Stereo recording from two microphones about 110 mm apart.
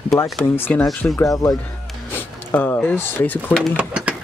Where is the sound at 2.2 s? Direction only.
20° left (ahead or behind).